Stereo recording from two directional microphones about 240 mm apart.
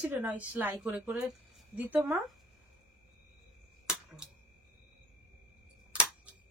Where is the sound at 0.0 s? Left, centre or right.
Centre.